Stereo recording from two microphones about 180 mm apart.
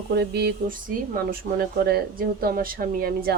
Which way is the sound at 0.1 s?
65° right (ahead or behind).